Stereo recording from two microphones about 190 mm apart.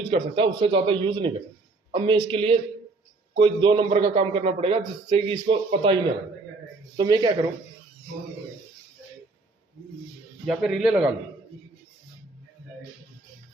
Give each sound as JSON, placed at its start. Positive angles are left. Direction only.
{"t": 0.0, "sound": "a man's voice", "side_deg": -30}
{"t": 10.4, "sound": "speech", "side_deg": -5}